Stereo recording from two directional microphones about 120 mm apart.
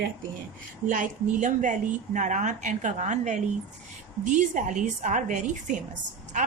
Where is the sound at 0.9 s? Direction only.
90° right.